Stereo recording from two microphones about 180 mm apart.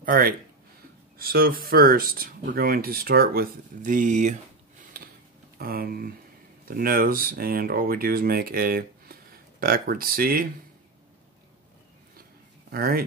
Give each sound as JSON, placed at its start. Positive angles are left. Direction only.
{"t": 0.0, "sound": "speech", "side_deg": -50}
{"t": 5.6, "sound": "speech", "side_deg": -55}
{"t": 12.7, "sound": "speech", "side_deg": -55}